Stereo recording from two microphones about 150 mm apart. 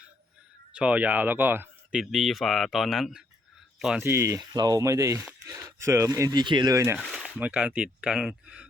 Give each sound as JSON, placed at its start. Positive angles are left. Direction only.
{"t": 0.7, "sound": "speech", "side_deg": -10}
{"t": 4.0, "sound": "speech", "side_deg": -15}
{"t": 7.0, "sound": "a sound", "side_deg": 0}
{"t": 7.3, "sound": "speech", "side_deg": -10}